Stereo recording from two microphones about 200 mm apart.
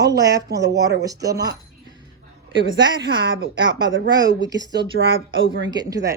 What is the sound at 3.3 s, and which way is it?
Speech, 70° right (ahead or behind).